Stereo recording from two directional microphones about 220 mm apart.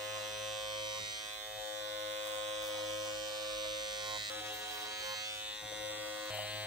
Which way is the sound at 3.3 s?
20° right (ahead or behind).